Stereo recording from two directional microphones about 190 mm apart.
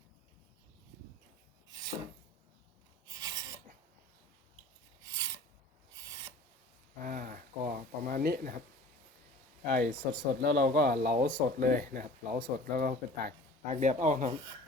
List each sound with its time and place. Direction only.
3.1 s filing: 20° right (ahead or behind)
5.0 s filing: 15° right (ahead or behind)
7.0 s a sound: 50° right (ahead or behind)
9.7 s speech: 45° right (ahead or behind)
10.4 s speech: 65° right (ahead or behind); by 14.3 s 40° right (ahead or behind)